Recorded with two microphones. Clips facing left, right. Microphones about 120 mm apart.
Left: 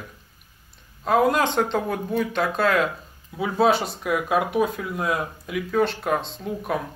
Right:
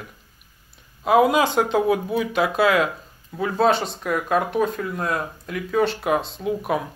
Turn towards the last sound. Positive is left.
turn(degrees=-5)  # may be behind; listen again after turning